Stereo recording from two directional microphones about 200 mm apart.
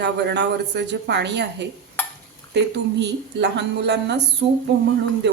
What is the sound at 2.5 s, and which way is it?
A woman's voice, 60° right (ahead or behind).